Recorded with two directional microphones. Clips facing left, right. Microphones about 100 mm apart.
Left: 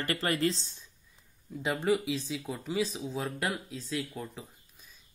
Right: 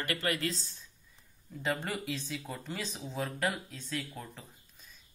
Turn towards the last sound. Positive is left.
turn(degrees=5)  # may be behind; listen again after turning